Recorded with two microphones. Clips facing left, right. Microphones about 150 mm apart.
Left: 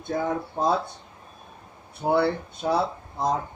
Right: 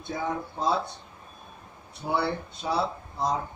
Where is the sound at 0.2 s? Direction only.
50° left (ahead or behind).